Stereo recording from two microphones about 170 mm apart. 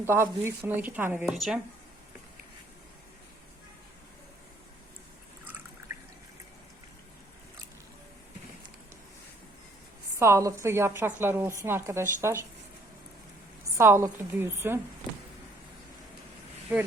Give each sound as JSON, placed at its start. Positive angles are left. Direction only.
{"t": 0.0, "sound": "a woman's voice", "side_deg": -15}
{"t": 10.2, "sound": "a woman's voice", "side_deg": -15}
{"t": 13.7, "sound": "a woman's voice", "side_deg": -15}